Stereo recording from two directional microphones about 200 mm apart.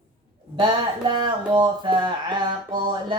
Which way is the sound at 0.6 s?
25° right (ahead or behind).